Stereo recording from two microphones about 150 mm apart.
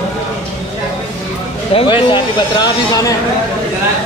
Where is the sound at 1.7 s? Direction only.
35° left (ahead or behind).